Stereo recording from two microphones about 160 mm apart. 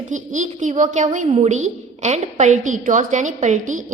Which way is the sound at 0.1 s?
50° right (ahead or behind).